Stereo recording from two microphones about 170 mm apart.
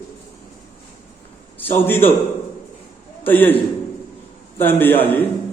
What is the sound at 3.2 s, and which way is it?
Speech, 10° left (ahead or behind).